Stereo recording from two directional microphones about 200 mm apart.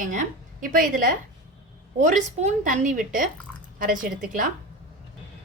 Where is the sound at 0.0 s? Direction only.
40° right (ahead or behind).